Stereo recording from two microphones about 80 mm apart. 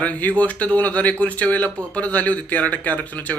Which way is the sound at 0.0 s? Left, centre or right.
Centre.